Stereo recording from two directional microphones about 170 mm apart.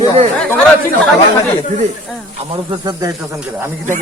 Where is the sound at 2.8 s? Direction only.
20° right (ahead or behind).